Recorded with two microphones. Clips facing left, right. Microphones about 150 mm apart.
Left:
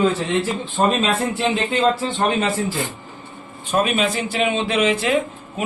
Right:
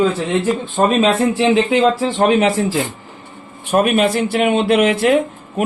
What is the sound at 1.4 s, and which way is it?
A man's voice, 90° right.